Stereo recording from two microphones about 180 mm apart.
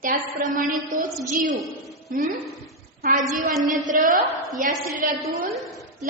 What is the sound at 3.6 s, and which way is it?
Speech, 45° right (ahead or behind).